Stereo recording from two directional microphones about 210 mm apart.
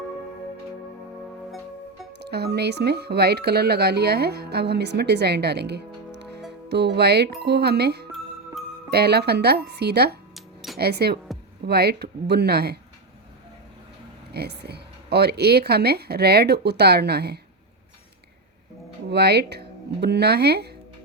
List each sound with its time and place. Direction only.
2.1 s speech: 50° right (ahead or behind)
10.3 s a sound: centre (ahead or behind)
10.8 s speech: 50° right (ahead or behind)
14.3 s speech: 50° right (ahead or behind)
19.1 s speech: 50° right (ahead or behind)